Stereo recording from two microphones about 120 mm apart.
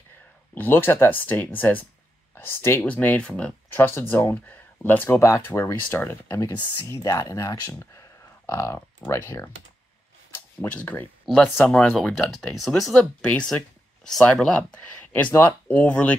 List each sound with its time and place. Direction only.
0.6 s speech: 15° left (ahead or behind)
10.6 s speech: 15° left (ahead or behind)
11.2 s speech: centre (ahead or behind)